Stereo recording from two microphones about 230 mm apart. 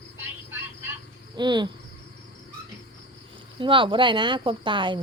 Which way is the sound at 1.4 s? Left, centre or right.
Centre.